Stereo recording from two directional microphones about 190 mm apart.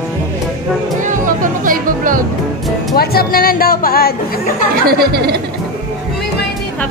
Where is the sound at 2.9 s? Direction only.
50° left (ahead or behind).